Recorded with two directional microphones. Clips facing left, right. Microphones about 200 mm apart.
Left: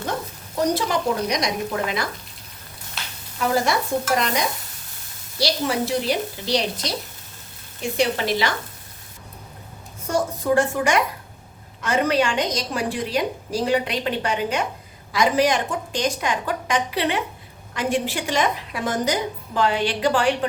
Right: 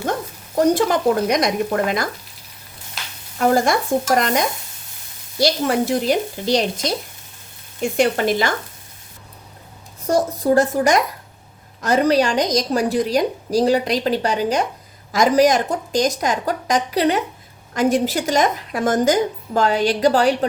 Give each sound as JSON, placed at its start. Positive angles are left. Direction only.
{"t": 0.7, "sound": "speech", "side_deg": -50}
{"t": 3.4, "sound": "speech", "side_deg": -45}
{"t": 7.9, "sound": "speech", "side_deg": -50}
{"t": 10.1, "sound": "a woman's voice", "side_deg": -35}